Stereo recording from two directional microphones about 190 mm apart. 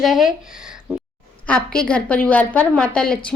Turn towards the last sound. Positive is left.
turn(degrees=5)  # may be behind; listen again after turning